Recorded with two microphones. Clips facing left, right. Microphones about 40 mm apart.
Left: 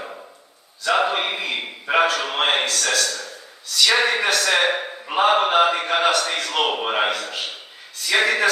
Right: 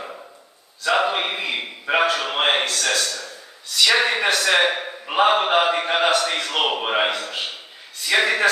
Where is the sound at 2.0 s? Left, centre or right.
Centre.